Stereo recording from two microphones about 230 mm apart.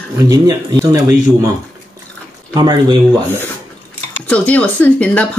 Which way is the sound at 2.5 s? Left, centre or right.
Centre.